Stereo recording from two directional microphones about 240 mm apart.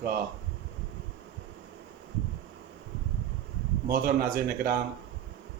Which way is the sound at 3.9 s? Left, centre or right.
Right.